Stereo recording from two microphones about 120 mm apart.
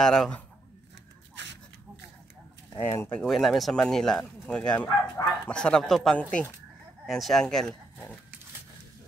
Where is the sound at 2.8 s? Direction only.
20° left (ahead or behind).